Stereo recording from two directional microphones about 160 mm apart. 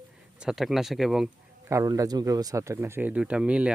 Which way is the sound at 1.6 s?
20° right (ahead or behind).